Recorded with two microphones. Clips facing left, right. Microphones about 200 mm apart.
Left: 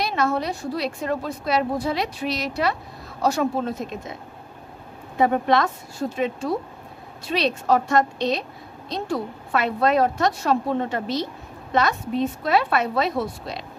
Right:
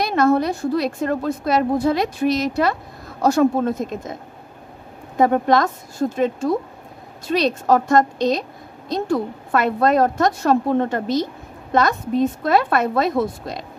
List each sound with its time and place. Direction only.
0.0 s a woman's voice: 50° right (ahead or behind)